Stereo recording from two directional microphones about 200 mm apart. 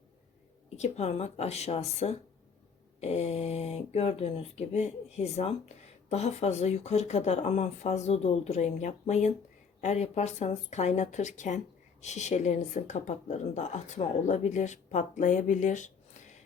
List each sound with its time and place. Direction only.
0.8 s speech: 35° left (ahead or behind)